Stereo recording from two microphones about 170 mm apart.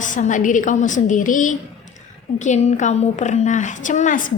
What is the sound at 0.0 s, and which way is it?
A woman's voice, 50° left (ahead or behind).